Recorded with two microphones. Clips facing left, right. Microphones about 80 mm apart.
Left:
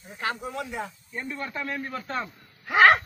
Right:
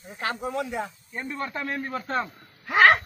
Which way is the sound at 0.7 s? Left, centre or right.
Centre.